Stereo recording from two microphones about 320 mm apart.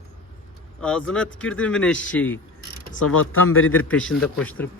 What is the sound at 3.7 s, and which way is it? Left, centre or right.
Speech, centre.